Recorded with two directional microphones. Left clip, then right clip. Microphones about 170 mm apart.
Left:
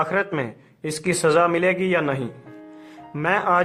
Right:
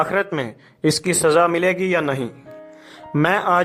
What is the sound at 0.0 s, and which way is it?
Speech, 40° right (ahead or behind).